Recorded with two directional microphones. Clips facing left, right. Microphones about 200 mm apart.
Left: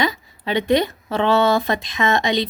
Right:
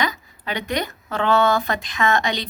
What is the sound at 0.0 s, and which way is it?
Speech, 25° left (ahead or behind).